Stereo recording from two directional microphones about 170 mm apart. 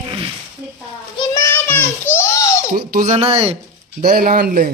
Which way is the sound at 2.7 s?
55° right (ahead or behind).